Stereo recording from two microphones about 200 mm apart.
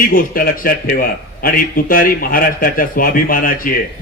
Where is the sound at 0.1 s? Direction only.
45° left (ahead or behind).